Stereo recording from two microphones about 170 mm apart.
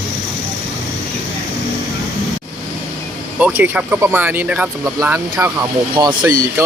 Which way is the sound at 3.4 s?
10° right (ahead or behind).